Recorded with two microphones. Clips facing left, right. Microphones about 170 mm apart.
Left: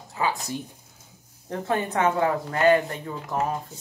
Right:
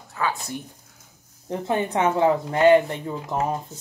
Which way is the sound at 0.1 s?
20° left (ahead or behind).